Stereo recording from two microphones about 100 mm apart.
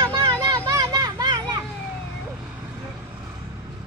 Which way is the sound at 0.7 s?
35° right (ahead or behind).